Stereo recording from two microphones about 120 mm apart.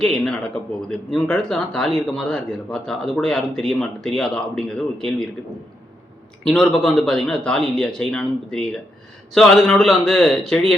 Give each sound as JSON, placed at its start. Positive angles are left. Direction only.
{"t": 0.0, "sound": "a man's voice", "side_deg": 5}
{"t": 6.4, "sound": "a man's voice", "side_deg": 5}